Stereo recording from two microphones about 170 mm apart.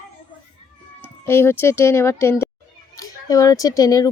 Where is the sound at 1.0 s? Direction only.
15° left (ahead or behind).